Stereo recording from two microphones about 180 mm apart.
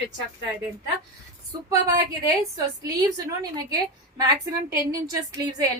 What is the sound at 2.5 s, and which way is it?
A woman's voice, 20° right (ahead or behind).